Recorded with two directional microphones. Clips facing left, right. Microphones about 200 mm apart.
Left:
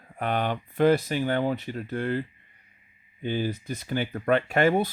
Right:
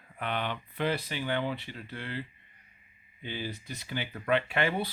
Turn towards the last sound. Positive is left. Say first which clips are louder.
# left 8 dB
turn(degrees=45)  # may be behind; listen again after turning